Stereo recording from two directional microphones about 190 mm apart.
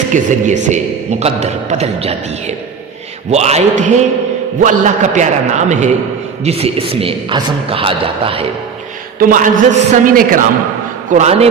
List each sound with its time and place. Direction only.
0.1 s a man's voice: 40° right (ahead or behind)
9.1 s a man's voice: 45° right (ahead or behind)
11.1 s a man's voice: 35° right (ahead or behind)